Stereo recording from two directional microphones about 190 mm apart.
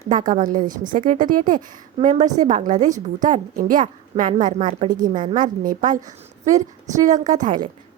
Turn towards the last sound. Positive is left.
turn(degrees=-40)  # may be behind; listen again after turning